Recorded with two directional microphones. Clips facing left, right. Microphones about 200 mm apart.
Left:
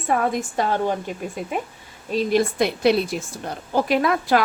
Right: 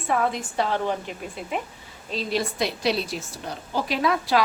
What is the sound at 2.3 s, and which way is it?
A woman's voice, 50° left (ahead or behind).